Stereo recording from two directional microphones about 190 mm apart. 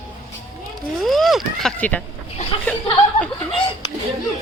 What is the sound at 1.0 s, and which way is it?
Vehicle, centre (ahead or behind).